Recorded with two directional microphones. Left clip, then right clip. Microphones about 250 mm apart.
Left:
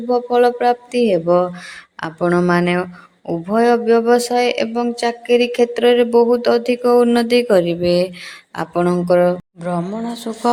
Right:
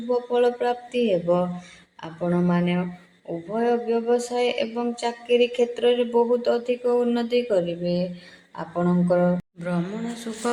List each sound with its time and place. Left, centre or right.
0.1 s speech: left
9.6 s speech: centre